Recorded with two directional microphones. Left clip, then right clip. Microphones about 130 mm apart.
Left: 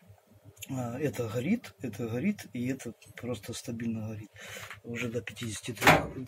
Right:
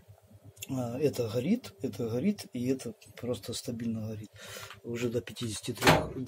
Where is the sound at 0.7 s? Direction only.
25° right (ahead or behind).